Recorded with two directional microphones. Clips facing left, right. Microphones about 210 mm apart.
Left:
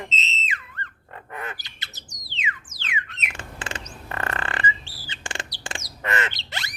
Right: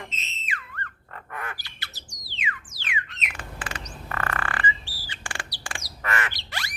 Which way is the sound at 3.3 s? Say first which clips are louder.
Left 2 dB; 25° left (ahead or behind).